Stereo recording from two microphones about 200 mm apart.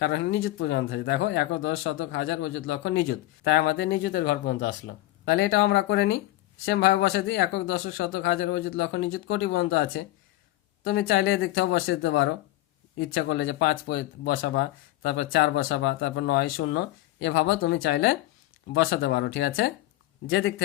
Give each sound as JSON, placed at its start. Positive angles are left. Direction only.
{"t": 0.0, "sound": "speech", "side_deg": 65}
{"t": 5.2, "sound": "speech", "side_deg": 65}
{"t": 17.8, "sound": "speech", "side_deg": 55}
{"t": 20.2, "sound": "speech", "side_deg": 75}